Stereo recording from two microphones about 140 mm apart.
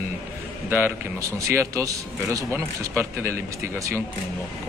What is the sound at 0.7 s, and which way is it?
A man's voice, 15° right (ahead or behind).